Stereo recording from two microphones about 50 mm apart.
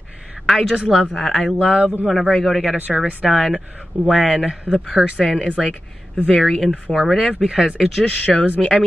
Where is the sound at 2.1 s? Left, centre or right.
Centre.